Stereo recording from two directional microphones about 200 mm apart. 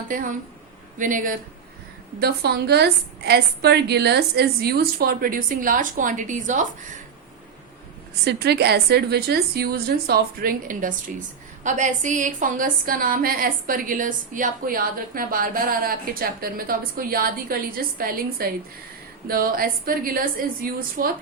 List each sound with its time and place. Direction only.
0.9 s speech: 40° right (ahead or behind)
2.2 s a woman's voice: 50° right (ahead or behind)
8.2 s a woman's voice: 55° right (ahead or behind)